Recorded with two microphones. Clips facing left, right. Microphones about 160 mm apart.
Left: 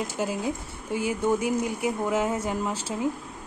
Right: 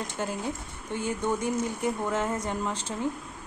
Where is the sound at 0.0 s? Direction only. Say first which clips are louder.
Left 4 dB; 10° left (ahead or behind).